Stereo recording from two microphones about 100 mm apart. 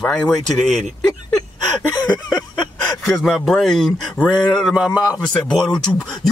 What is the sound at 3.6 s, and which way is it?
Speech, 5° left (ahead or behind).